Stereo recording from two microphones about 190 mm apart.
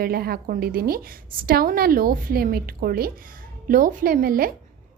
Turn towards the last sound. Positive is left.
turn(degrees=-50)  # may be behind; listen again after turning